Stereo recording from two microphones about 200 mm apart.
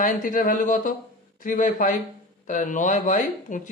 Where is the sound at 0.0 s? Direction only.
45° left (ahead or behind).